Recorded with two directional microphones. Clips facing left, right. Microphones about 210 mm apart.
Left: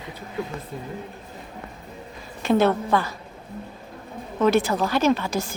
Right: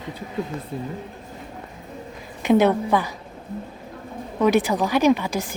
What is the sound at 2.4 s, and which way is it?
Speech, 15° right (ahead or behind).